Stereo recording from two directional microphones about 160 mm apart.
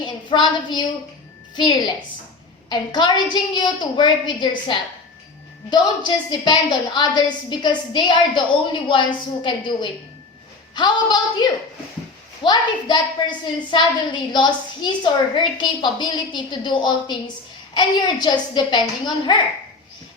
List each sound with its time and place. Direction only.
0.0 s a woman's voice: 30° left (ahead or behind)